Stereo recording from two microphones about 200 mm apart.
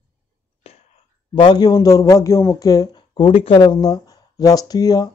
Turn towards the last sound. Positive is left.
turn(degrees=20)  # may be behind; listen again after turning